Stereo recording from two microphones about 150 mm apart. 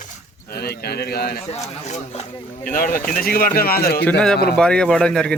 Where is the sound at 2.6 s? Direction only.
65° left (ahead or behind); by 4.0 s 90° left.